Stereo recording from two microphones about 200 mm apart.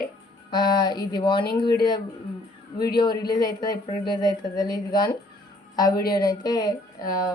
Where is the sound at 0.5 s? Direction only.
20° left (ahead or behind).